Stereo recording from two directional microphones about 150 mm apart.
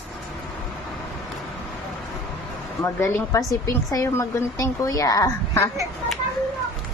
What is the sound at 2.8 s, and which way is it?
A woman's voice, 20° left (ahead or behind).